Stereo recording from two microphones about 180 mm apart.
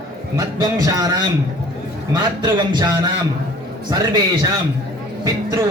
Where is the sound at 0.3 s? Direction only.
20° right (ahead or behind).